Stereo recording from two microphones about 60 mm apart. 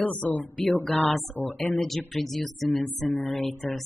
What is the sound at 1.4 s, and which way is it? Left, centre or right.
Speech, left.